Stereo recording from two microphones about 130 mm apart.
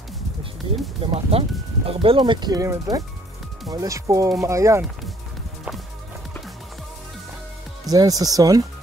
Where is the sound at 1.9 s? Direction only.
45° right (ahead or behind); by 4.8 s 25° right (ahead or behind).